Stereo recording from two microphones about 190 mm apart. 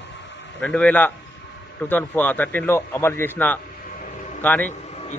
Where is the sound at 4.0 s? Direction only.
45° left (ahead or behind).